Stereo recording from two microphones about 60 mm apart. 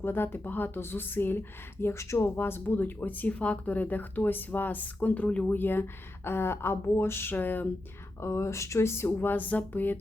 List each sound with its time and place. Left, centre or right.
0.0 s speech: left
5.5 s speech: left
7.3 s speech: left
8.2 s speech: left
9.1 s speech: left